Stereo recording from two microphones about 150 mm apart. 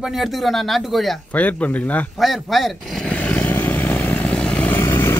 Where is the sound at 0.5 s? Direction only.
Centre (ahead or behind).